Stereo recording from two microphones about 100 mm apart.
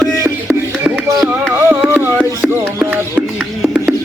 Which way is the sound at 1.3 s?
15° right (ahead or behind).